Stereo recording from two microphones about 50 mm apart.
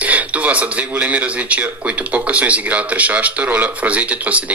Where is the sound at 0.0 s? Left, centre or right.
Right.